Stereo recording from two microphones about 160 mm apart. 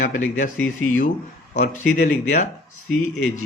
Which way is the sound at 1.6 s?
60° left (ahead or behind).